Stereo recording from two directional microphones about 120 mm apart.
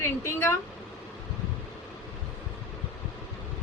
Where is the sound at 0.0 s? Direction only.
20° left (ahead or behind).